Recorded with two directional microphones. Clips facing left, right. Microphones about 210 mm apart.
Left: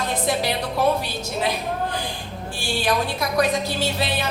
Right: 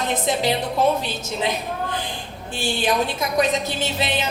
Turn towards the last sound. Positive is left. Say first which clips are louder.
# even
turn(degrees=-20)  # may be behind; listen again after turning